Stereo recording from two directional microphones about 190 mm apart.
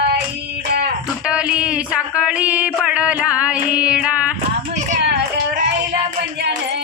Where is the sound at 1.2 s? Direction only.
5° right (ahead or behind).